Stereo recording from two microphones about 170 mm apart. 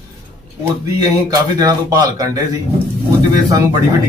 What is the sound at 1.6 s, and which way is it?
Speech, 20° right (ahead or behind).